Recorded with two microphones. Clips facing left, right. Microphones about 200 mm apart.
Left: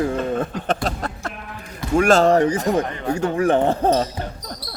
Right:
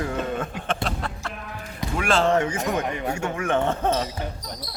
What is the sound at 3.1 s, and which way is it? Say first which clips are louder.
Speech: left 9 dB; 35° left (ahead or behind).